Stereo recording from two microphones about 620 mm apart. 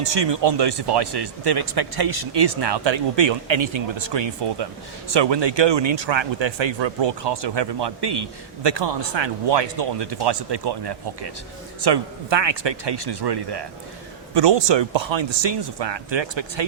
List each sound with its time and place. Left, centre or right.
0.0 s speech: right